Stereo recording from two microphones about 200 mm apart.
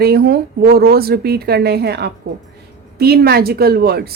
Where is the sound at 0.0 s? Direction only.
50° right (ahead or behind).